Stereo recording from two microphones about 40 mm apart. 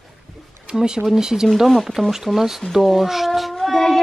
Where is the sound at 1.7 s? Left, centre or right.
Centre.